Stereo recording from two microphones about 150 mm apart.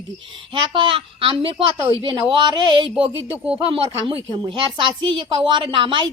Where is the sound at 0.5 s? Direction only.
35° right (ahead or behind).